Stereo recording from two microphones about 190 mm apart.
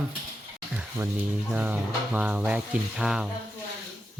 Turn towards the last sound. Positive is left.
turn(degrees=-5)  # may be behind; listen again after turning